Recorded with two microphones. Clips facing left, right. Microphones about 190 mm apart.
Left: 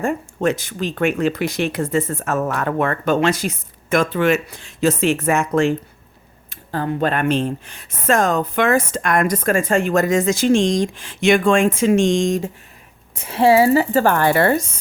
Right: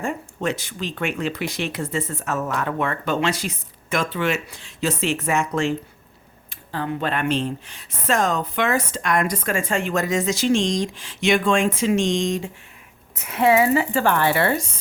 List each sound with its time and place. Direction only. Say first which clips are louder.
0.0 s speech: left 6 dB; 45° left (ahead or behind)
13.1 s speech: left 4 dB; 30° left (ahead or behind)